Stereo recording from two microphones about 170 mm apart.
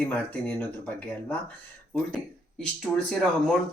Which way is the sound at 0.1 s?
10° left (ahead or behind).